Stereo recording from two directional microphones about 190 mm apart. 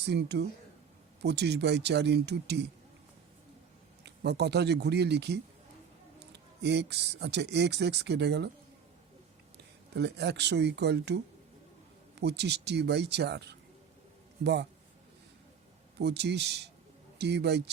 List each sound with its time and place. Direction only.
0.0 s speech: 60° right (ahead or behind)
4.0 s speech: 60° right (ahead or behind)
9.9 s speech: 60° right (ahead or behind)
12.2 s speech: 60° right (ahead or behind)
16.0 s speech: 60° right (ahead or behind)